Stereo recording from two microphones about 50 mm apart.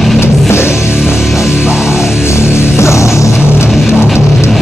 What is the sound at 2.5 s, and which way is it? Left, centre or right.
Music, left.